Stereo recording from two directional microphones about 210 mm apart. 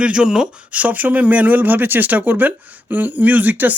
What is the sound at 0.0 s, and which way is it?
Speech, 5° right (ahead or behind).